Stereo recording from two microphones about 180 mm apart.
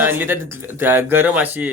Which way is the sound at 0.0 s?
10° right (ahead or behind).